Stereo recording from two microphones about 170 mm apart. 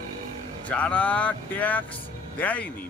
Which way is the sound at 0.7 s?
10° left (ahead or behind).